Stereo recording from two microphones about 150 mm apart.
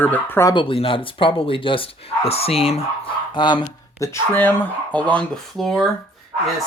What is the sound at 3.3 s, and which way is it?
Speech, 30° left (ahead or behind).